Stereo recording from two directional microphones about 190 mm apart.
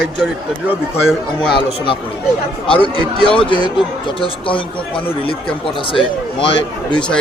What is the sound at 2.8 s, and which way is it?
A man's voice, 25° left (ahead or behind).